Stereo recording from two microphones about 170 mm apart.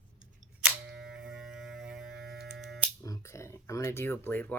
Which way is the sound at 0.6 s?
5° right (ahead or behind).